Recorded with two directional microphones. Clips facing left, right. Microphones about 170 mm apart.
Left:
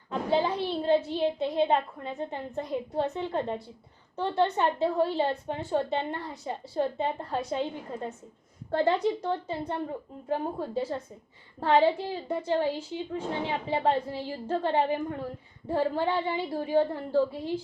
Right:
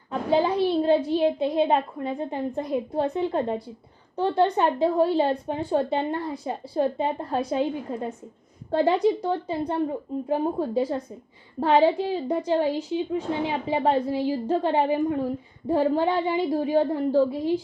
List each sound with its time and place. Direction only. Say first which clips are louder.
0.1 s a woman's voice: right 4 dB; 15° right (ahead or behind)